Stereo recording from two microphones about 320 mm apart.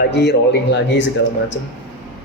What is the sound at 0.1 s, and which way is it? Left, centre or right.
Speech, left.